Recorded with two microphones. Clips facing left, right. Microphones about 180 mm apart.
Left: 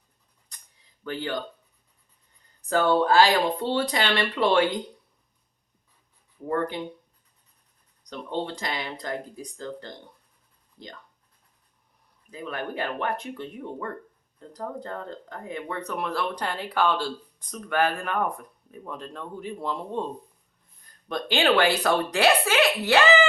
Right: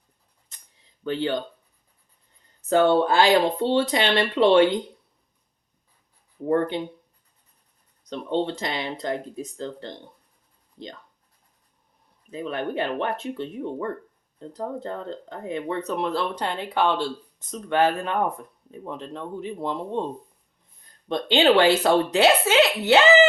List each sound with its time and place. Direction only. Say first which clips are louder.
1.0 s speech: right 5 dB; 25° right (ahead or behind)
2.6 s speech: right 3 dB; 25° right (ahead or behind)
6.5 s speech: right 5 dB; 25° right (ahead or behind)
8.1 s speech: right 5 dB; 25° right (ahead or behind)
12.3 s speech: right 5 dB; 25° right (ahead or behind)
21.1 s speech: right 4 dB; 25° right (ahead or behind)